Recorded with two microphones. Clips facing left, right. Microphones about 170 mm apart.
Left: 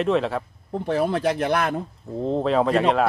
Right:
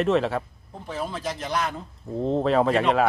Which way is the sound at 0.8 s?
65° left (ahead or behind).